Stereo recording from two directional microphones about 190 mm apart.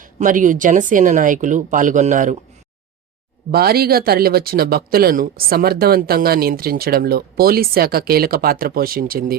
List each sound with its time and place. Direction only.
0.0 s speech: 45° right (ahead or behind)
3.5 s speech: 55° right (ahead or behind)